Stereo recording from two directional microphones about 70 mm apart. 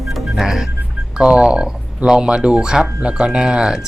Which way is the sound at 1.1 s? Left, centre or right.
Centre.